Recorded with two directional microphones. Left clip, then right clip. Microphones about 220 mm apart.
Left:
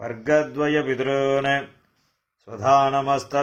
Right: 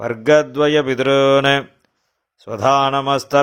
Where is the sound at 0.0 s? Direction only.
45° right (ahead or behind).